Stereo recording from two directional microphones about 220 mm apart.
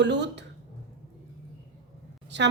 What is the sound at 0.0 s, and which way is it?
Speech, 50° right (ahead or behind).